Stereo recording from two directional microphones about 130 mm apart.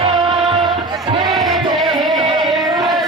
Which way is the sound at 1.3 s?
Centre (ahead or behind).